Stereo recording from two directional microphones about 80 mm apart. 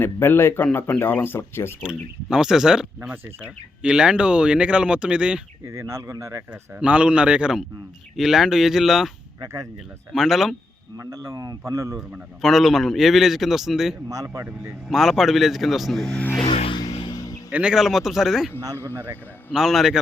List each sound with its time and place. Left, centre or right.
0.0 s speech: left
1.8 s speech: centre
5.6 s speech: right
6.5 s a man's voice: centre
9.4 s speech: right
10.1 s a man's voice: centre
10.9 s speech: right
12.4 s a man's voice: centre
14.1 s speech: right
14.8 s a man's voice: centre
16.7 s music: left
17.5 s a man's voice: centre
19.5 s a man's voice: centre